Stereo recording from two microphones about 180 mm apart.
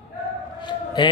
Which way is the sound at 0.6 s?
25° left (ahead or behind).